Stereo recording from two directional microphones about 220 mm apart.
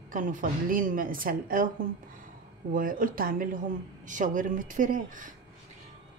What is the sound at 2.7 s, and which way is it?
A woman's voice, 40° right (ahead or behind).